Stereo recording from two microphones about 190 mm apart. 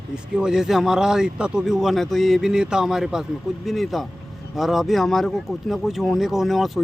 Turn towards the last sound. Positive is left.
turn(degrees=0)  # may be behind; listen again after turning